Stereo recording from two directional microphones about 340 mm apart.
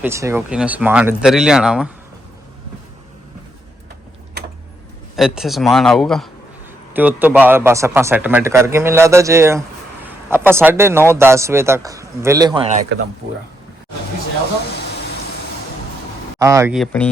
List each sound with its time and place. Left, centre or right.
0.0 s speech: centre
5.1 s a man's voice: centre
12.9 s speech: right
16.4 s speech: centre